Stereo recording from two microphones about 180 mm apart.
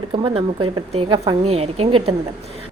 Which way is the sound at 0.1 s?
30° right (ahead or behind).